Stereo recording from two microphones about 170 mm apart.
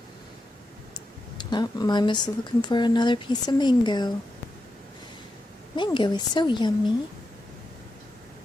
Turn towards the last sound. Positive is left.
turn(degrees=25)  # may be behind; listen again after turning